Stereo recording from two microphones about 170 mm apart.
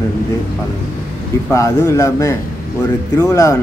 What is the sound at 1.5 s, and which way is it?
A man's voice, 20° left (ahead or behind).